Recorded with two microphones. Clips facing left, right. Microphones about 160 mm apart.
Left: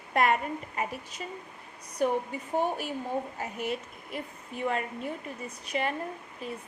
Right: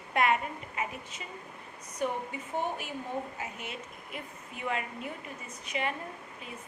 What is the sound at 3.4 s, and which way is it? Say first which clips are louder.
A woman's voice: left 7 dB; 40° left (ahead or behind).